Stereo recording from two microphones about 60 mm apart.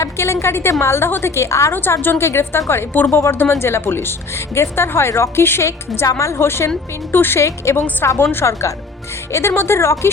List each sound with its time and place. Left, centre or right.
0.0 s a woman's voice: left
1.7 s a woman's voice: left
6.1 s a woman's voice: left
7.4 s a woman's voice: left
8.2 s a woman's voice: left